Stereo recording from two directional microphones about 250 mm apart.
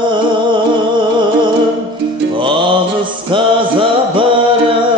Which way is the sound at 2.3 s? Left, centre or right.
Centre.